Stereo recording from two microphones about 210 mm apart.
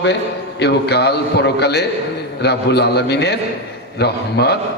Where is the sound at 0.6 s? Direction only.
50° left (ahead or behind).